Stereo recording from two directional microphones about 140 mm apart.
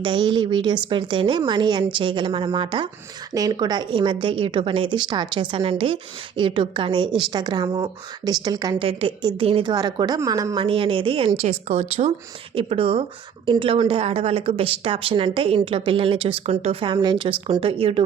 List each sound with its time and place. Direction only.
0.0 s a woman's voice: 35° right (ahead or behind)
8.8 s a woman's voice: 40° right (ahead or behind)
11.3 s a woman's voice: 50° right (ahead or behind)